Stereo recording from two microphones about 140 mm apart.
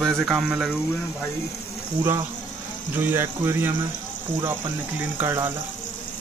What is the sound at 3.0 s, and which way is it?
Speech, 15° right (ahead or behind).